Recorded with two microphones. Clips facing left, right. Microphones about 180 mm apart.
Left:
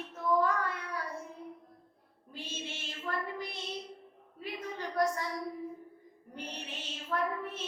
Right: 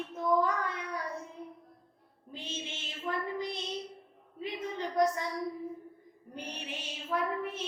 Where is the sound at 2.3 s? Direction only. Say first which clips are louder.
Right 1 dB; 20° right (ahead or behind).